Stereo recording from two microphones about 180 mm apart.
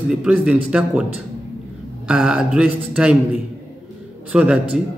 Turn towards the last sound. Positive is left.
turn(degrees=-5)  # may be behind; listen again after turning